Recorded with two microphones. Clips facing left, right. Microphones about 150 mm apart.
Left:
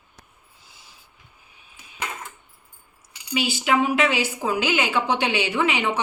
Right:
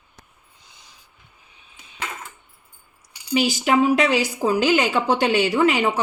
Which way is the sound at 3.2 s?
40° right (ahead or behind).